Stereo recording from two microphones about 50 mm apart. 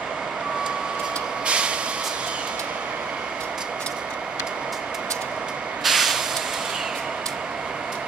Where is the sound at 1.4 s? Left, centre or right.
Right.